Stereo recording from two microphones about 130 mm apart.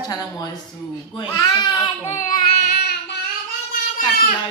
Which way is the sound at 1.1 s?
30° left (ahead or behind).